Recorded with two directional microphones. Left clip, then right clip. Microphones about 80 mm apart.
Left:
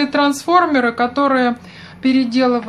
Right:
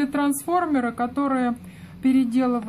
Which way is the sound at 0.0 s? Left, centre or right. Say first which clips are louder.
Left 8 dB; right.